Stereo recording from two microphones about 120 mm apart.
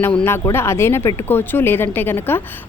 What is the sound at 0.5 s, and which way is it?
A woman's voice, 20° left (ahead or behind).